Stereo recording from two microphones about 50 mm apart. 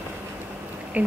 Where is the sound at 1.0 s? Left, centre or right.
Right.